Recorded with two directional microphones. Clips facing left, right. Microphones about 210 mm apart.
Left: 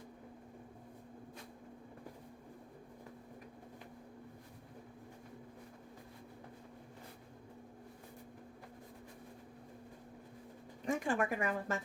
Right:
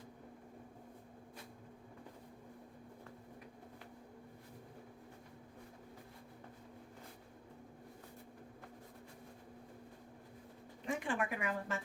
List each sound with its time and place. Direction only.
10.8 s speech: 45° left (ahead or behind)